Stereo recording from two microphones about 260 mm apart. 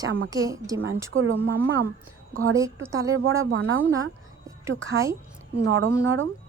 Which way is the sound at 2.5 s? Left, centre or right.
Centre.